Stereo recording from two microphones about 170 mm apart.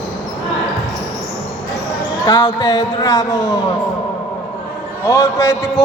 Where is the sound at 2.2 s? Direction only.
25° left (ahead or behind).